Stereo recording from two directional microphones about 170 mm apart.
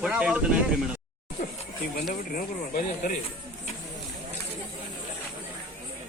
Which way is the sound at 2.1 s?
50° left (ahead or behind).